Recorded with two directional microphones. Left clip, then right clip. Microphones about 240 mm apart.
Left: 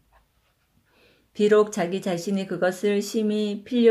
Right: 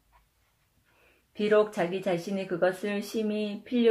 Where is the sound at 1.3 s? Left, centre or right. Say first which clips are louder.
Left 5 dB; left.